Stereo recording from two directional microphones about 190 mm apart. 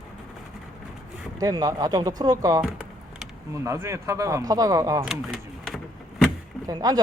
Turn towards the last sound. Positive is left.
turn(degrees=-20)  # may be behind; listen again after turning